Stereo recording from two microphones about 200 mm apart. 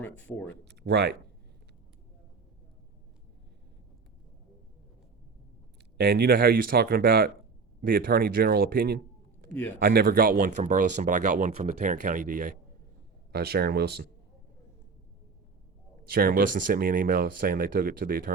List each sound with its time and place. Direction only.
0.0 s speech: 10° left (ahead or behind)
0.6 s speech: 55° right (ahead or behind)
6.0 s speech: 50° right (ahead or behind)
13.3 s speech: 50° right (ahead or behind)
16.0 s speech: 50° right (ahead or behind)